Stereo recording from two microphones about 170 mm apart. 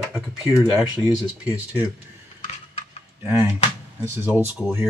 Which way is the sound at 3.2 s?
15° right (ahead or behind).